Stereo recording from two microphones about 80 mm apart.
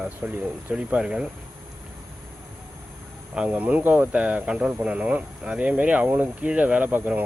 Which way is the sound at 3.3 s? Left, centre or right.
Centre.